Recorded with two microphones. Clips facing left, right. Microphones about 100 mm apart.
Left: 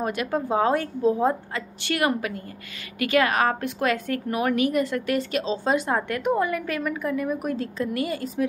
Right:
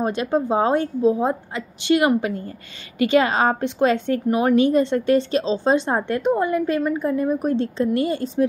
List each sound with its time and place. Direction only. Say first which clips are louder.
0.0 s a woman's voice: right 5 dB; 25° right (ahead or behind)